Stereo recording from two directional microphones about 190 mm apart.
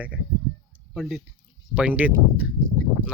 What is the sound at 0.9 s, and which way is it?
Speech, centre (ahead or behind).